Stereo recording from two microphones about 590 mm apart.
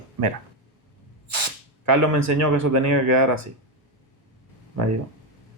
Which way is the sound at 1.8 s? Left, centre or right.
Right.